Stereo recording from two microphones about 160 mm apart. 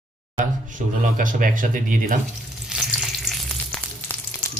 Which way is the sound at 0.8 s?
50° right (ahead or behind).